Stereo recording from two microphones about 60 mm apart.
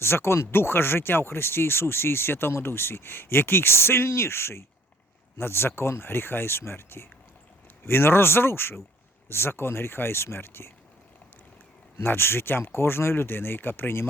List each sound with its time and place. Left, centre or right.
0.0 s speech: left
11.9 s speech: left